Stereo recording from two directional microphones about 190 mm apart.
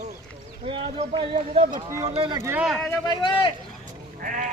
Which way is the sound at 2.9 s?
25° left (ahead or behind).